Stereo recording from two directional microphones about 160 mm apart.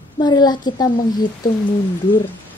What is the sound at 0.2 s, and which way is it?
A child's voice, 25° left (ahead or behind).